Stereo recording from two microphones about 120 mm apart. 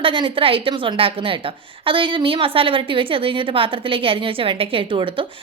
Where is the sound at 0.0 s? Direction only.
45° right (ahead or behind).